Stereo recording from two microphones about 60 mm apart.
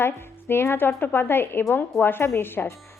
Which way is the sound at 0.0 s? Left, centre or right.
Left.